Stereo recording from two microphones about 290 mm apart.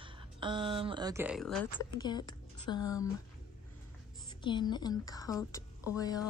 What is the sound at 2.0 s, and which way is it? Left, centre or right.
Speech, centre.